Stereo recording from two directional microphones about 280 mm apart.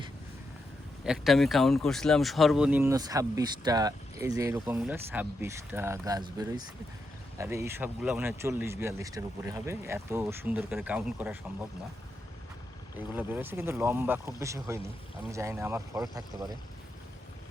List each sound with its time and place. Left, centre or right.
1.0 s speech: centre
13.1 s speech: centre